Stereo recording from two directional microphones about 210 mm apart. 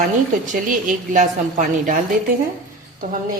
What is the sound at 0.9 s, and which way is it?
A woman's voice, 40° right (ahead or behind).